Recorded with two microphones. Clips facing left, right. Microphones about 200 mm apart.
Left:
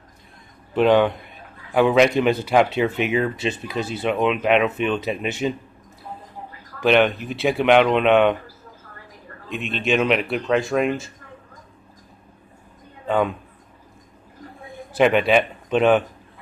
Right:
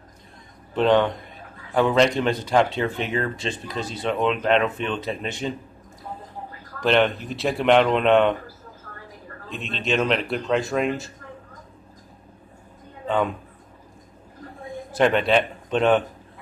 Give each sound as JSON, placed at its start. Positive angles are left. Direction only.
{"t": 0.7, "sound": "speech", "side_deg": 10}
{"t": 6.8, "sound": "speech", "side_deg": 5}
{"t": 9.5, "sound": "a man's voice", "side_deg": -35}
{"t": 9.8, "sound": "speech", "side_deg": 5}
{"t": 14.9, "sound": "a man's voice", "side_deg": 5}